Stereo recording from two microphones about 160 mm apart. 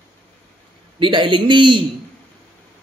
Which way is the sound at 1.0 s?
30° right (ahead or behind).